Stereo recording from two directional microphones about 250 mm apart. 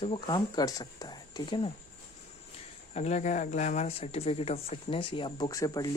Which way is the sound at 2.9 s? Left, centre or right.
Left.